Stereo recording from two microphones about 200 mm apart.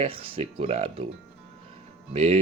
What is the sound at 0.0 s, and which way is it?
A man's voice, 25° right (ahead or behind).